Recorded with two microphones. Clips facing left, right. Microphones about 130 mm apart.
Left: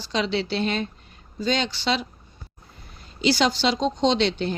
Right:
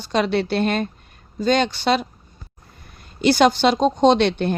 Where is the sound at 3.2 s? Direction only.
55° right (ahead or behind).